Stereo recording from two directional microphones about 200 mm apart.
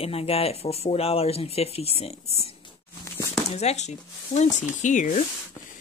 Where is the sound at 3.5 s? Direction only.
35° left (ahead or behind).